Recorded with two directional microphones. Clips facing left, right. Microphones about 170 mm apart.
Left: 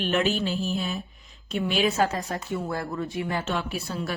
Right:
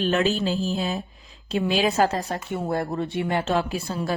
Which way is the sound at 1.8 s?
35° right (ahead or behind).